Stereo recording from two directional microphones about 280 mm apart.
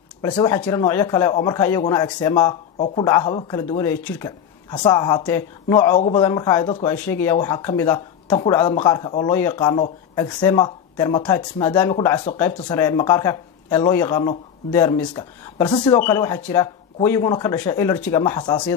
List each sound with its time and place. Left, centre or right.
0.2 s speech: centre